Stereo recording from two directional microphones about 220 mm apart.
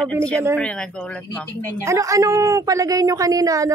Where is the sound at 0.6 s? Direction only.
5° left (ahead or behind).